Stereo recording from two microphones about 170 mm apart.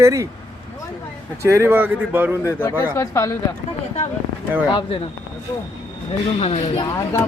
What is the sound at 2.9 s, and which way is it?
Speech, 15° left (ahead or behind).